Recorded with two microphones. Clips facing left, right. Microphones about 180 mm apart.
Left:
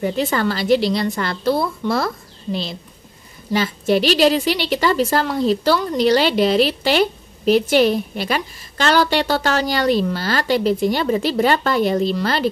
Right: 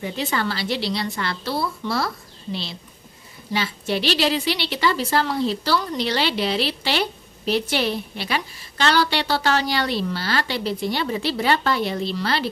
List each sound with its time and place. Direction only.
0.0 s a woman's voice: 45° left (ahead or behind)